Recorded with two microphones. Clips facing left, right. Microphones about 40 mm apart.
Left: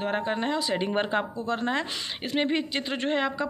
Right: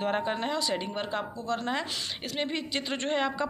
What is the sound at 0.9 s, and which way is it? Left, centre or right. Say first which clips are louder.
A woman's voice: left 6 dB; left.